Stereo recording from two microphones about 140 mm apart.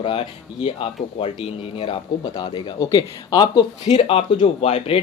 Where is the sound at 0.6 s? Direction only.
40° left (ahead or behind).